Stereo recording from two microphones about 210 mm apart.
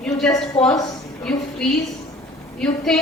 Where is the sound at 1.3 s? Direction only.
Centre (ahead or behind).